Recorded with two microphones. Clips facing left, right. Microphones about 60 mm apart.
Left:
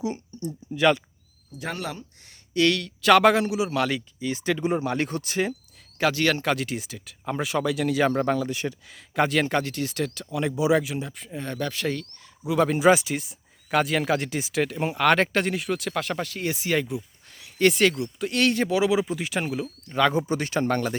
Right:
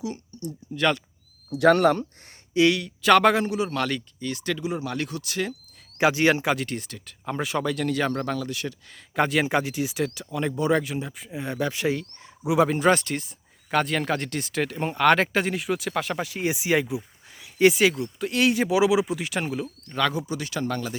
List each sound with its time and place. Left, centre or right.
0.0 s a sound: left
1.5 s speech: right
2.6 s speech: centre
3.1 s speech: centre
4.4 s speech: left
4.6 s speech: left
6.0 s speech: centre
6.4 s speech: centre
6.7 s speech: centre; by 8.7 s left
9.1 s speech: centre
12.5 s speech: centre
19.9 s speech: centre
20.1 s speech: left